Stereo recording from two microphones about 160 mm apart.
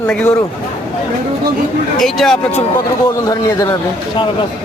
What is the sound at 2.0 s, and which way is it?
Speech, centre (ahead or behind).